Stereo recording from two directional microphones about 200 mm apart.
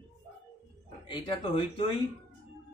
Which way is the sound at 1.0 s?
25° left (ahead or behind).